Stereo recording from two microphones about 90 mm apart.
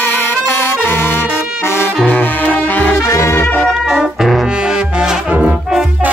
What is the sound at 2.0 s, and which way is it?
Brass instrument, 20° left (ahead or behind).